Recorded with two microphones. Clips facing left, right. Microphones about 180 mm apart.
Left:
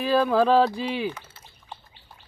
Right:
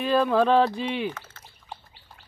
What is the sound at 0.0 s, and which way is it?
Speech, 5° left (ahead or behind).